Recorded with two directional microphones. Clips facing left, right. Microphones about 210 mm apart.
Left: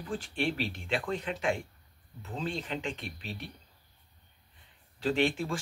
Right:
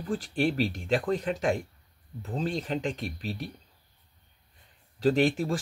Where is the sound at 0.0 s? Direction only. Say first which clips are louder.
Right 5 dB; 40° right (ahead or behind).